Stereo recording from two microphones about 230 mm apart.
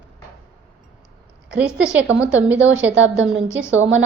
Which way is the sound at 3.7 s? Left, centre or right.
Right.